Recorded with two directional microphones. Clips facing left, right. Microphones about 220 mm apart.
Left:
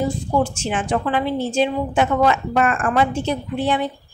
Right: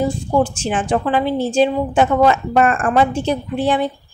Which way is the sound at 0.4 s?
30° right (ahead or behind).